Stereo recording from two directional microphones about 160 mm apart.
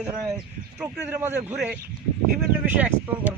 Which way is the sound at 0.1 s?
20° right (ahead or behind).